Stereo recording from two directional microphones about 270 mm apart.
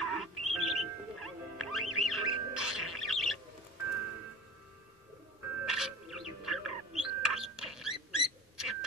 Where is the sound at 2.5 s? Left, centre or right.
Centre.